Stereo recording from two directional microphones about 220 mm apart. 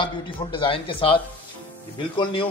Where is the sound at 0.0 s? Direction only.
25° left (ahead or behind).